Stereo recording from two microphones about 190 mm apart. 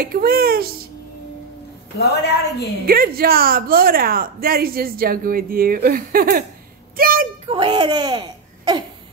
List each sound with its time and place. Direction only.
0.0 s speech: 50° right (ahead or behind)
2.0 s a woman's voice: 60° left (ahead or behind)
2.9 s a woman's voice: 50° right (ahead or behind)
7.4 s speech: 25° right (ahead or behind)